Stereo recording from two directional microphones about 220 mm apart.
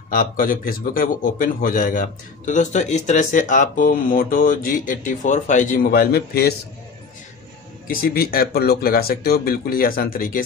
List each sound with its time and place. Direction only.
0.1 s a man's voice: 40° left (ahead or behind)
7.9 s speech: 45° left (ahead or behind)